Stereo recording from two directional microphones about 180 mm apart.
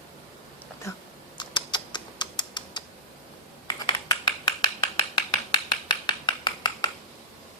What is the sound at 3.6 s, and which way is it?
Computer keyboard, 25° left (ahead or behind).